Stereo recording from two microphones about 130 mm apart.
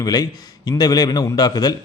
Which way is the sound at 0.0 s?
30° left (ahead or behind).